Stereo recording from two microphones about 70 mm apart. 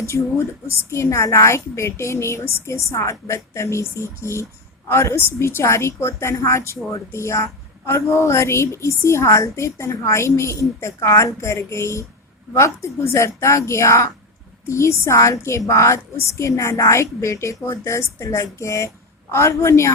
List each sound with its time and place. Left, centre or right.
0.0 s a woman's voice: left